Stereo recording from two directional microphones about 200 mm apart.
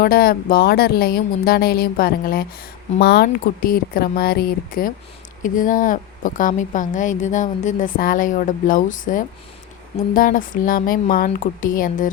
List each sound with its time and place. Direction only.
0.0 s speech: 50° left (ahead or behind)